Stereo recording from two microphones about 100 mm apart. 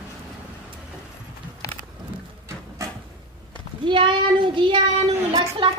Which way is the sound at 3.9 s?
55° right (ahead or behind).